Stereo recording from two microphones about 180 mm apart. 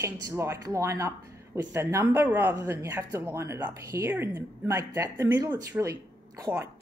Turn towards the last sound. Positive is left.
turn(degrees=-15)  # may be behind; listen again after turning